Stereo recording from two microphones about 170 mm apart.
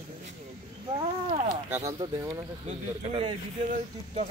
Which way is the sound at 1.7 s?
15° right (ahead or behind).